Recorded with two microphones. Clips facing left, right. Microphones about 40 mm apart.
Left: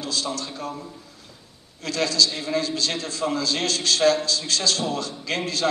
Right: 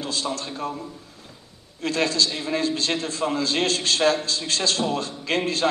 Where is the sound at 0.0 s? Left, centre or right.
Right.